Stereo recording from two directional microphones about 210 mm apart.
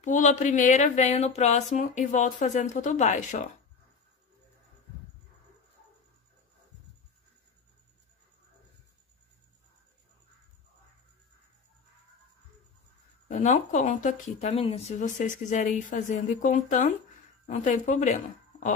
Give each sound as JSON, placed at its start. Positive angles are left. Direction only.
{"t": 0.0, "sound": "speech", "side_deg": 35}
{"t": 13.3, "sound": "a woman's voice", "side_deg": 35}